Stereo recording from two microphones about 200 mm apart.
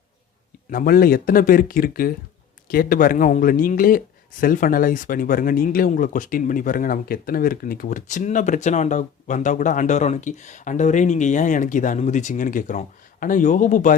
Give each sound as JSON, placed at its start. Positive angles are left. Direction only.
{"t": 0.7, "sound": "speech", "side_deg": 45}